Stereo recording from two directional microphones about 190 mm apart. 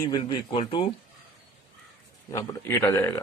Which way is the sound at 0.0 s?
20° left (ahead or behind).